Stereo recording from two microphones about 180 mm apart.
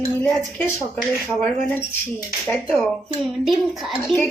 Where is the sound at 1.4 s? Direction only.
10° left (ahead or behind).